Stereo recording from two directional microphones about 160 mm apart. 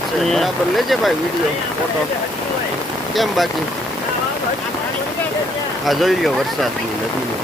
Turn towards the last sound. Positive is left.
turn(degrees=0)  # may be behind; listen again after turning